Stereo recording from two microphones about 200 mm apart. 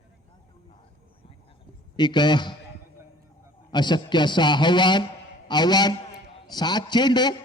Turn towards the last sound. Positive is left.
turn(degrees=20)  # may be behind; listen again after turning